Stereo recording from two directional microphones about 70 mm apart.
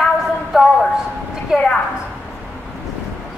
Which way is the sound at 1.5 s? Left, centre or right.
Centre.